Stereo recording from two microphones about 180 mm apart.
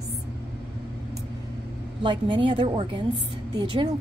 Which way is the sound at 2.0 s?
25° right (ahead or behind).